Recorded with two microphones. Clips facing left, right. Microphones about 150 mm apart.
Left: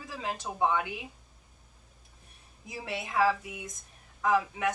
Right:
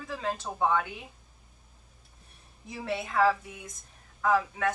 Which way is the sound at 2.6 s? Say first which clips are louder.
Right 4 dB; 15° left (ahead or behind).